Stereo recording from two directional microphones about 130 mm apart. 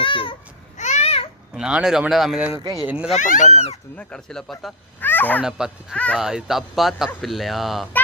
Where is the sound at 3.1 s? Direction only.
80° left.